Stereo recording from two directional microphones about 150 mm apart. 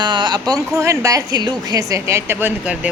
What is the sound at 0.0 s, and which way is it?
A woman's voice, 30° right (ahead or behind).